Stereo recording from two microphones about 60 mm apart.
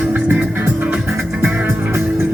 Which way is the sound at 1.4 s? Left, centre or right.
Right.